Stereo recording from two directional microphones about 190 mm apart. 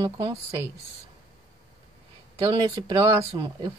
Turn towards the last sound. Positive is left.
turn(degrees=-20)  # may be behind; listen again after turning